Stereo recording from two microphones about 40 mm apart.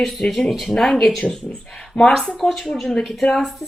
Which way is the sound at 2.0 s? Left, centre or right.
Left.